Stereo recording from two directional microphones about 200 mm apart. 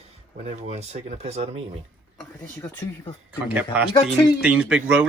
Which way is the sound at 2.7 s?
20° left (ahead or behind).